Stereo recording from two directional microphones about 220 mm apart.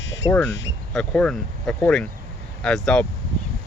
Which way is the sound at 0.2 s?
15° left (ahead or behind).